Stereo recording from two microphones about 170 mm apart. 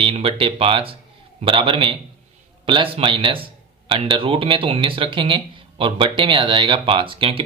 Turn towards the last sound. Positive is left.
turn(degrees=-35)  # may be behind; listen again after turning